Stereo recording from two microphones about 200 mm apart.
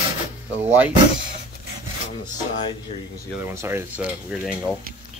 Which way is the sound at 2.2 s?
20° left (ahead or behind).